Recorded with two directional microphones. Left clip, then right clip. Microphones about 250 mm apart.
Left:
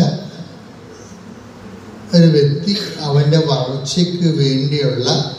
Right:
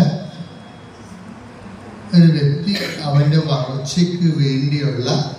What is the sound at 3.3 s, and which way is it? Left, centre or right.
A man's voice, left.